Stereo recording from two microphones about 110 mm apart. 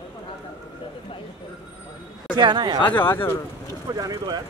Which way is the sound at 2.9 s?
20° left (ahead or behind).